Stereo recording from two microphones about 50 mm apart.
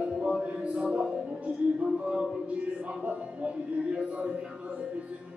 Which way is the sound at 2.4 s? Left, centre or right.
Right.